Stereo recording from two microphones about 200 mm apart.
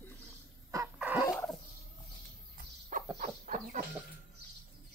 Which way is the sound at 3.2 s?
40° right (ahead or behind).